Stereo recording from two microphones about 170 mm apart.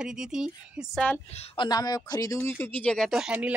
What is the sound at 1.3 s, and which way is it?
Speech, 35° left (ahead or behind).